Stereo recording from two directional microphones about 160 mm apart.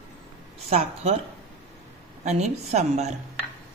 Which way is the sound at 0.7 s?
45° right (ahead or behind).